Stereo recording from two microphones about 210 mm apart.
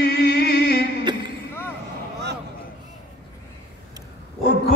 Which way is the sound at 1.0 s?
20° right (ahead or behind).